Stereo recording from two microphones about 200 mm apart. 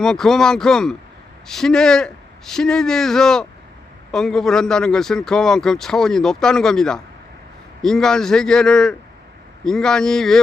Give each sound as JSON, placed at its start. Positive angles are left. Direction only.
{"t": 0.0, "sound": "a man's voice", "side_deg": 0}